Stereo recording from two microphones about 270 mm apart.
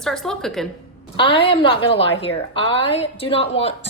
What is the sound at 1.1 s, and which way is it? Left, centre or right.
A woman's voice, centre.